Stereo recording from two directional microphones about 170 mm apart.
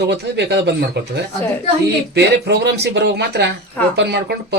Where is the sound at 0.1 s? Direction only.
80° right.